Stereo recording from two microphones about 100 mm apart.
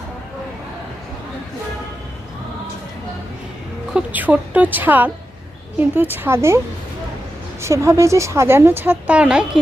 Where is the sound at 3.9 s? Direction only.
15° right (ahead or behind).